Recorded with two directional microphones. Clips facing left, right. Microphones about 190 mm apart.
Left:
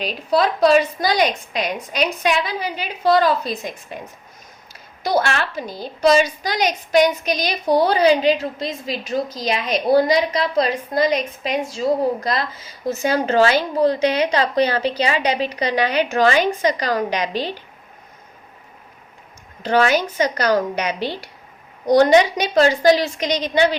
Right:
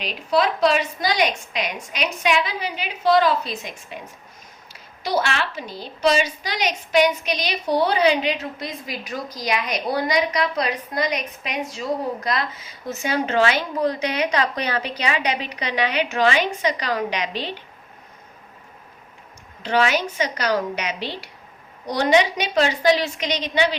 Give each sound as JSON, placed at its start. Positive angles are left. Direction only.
{"t": 0.0, "sound": "a woman's voice", "side_deg": 35}
{"t": 5.0, "sound": "a woman's voice", "side_deg": 45}
{"t": 19.6, "sound": "a woman's voice", "side_deg": 45}